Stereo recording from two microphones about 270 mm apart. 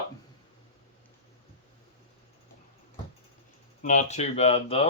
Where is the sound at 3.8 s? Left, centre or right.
Left.